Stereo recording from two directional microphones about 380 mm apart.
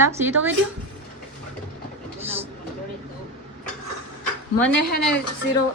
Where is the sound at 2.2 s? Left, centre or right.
Centre.